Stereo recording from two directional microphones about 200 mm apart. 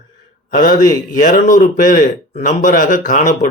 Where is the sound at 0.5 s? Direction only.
40° left (ahead or behind).